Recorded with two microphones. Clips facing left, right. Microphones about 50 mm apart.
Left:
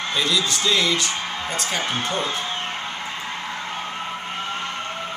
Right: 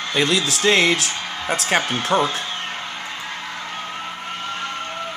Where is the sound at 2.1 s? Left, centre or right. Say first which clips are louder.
Right 11 dB; right.